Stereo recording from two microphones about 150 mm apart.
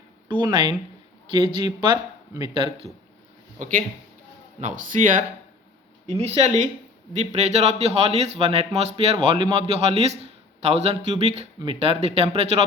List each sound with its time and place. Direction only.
0.3 s speech: 35° right (ahead or behind)
4.6 s speech: 60° right (ahead or behind)
6.1 s a man's voice: 45° right (ahead or behind)